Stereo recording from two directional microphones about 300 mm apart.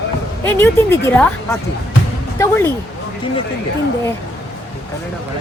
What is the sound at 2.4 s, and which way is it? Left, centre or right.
Speech, centre.